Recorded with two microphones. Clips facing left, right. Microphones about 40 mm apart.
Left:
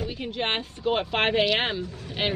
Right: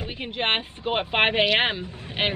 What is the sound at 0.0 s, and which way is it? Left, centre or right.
A woman's voice, right.